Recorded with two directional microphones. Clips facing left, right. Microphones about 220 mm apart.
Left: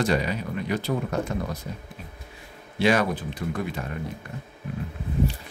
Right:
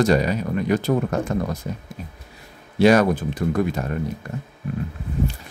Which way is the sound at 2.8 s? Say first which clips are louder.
Right 7 dB; 40° right (ahead or behind).